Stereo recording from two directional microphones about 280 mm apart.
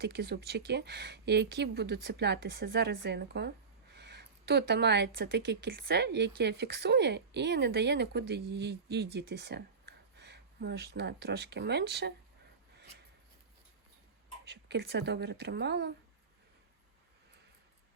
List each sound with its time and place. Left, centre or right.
0.0 s speech: right
14.5 s speech: right